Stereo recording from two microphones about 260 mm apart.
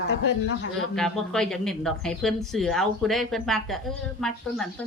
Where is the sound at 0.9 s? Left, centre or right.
Centre.